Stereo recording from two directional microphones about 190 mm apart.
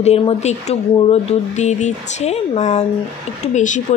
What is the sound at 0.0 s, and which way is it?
Speech, 35° left (ahead or behind).